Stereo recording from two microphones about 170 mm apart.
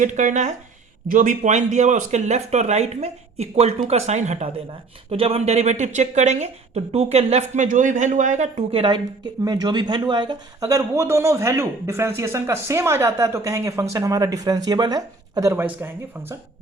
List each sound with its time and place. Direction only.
0.0 s speech: 45° right (ahead or behind); by 16.4 s 10° right (ahead or behind)